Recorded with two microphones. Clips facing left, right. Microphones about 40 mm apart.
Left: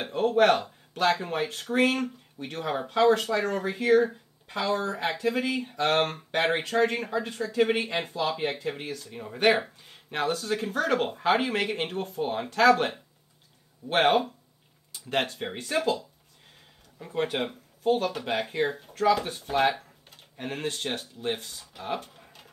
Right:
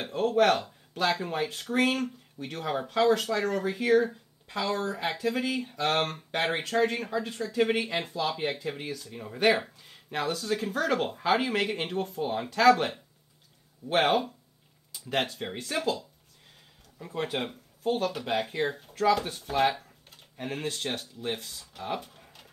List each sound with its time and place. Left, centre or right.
0.0 s speech: centre
9.0 s speech: centre
9.4 s speech: left
10.1 s speech: left
10.4 s speech: left
14.0 s speech: centre
15.6 s speech: centre
17.0 s speech: centre
22.1 s a sound: centre